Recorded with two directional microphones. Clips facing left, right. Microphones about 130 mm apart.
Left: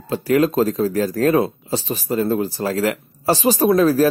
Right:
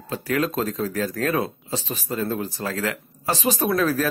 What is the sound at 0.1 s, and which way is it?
Speech, 35° left (ahead or behind).